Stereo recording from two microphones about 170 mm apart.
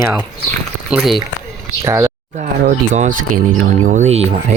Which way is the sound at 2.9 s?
45° right (ahead or behind).